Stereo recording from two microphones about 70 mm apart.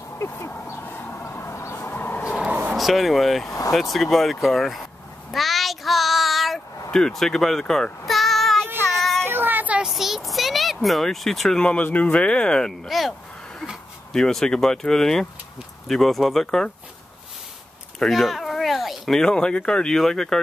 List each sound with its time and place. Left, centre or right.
0.2 s speech: left
0.7 s train: left
2.7 s speech: centre
3.4 s speech: left
3.9 s speech: centre
5.3 s child singing: centre
9.2 s child singing: right
9.8 s a sound: centre
11.6 s speech: centre
12.8 s a sound: centre
14.1 s speech: centre
17.9 s speech: centre